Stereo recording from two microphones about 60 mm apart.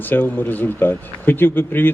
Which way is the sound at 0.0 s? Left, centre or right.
Left.